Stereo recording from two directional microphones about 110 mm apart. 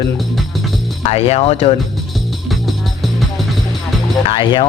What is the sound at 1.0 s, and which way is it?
Speech, 70° left (ahead or behind).